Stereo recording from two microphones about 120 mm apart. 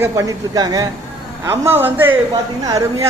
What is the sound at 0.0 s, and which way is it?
Speech, 30° right (ahead or behind).